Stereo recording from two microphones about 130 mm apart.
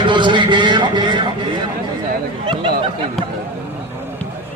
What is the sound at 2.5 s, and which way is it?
Speech, 40° right (ahead or behind).